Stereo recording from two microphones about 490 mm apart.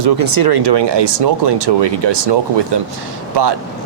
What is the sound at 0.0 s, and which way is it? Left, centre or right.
Speech, right.